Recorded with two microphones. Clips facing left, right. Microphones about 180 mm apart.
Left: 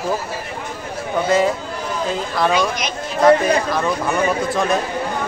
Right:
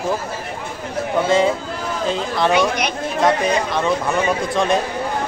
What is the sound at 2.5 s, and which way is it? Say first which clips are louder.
Speech: right 2 dB; 60° right (ahead or behind).